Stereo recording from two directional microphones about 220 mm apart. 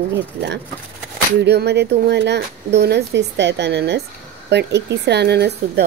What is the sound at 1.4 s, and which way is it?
Speech, 50° right (ahead or behind).